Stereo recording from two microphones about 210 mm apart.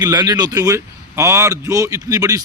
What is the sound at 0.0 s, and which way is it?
A man's voice, 20° right (ahead or behind).